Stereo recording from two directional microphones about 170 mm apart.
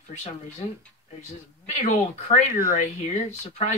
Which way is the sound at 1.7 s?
45° left (ahead or behind).